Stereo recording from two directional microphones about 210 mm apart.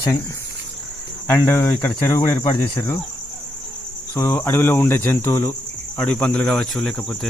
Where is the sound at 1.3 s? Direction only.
10° left (ahead or behind).